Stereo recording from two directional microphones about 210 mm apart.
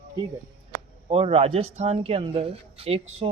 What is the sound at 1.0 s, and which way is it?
Speech, 25° right (ahead or behind).